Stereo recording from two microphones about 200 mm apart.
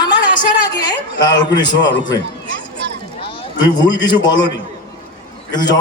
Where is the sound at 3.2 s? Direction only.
20° left (ahead or behind).